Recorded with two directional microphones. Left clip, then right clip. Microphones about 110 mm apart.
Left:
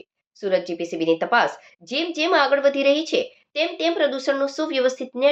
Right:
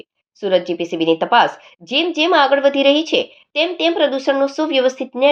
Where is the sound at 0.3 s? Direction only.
25° right (ahead or behind).